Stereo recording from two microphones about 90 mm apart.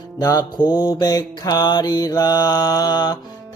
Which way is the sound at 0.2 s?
45° left (ahead or behind).